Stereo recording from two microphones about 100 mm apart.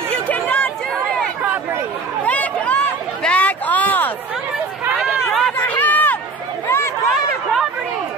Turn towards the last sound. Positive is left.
turn(degrees=0)  # may be behind; listen again after turning